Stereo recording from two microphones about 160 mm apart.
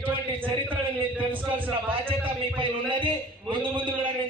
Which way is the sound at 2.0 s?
35° right (ahead or behind).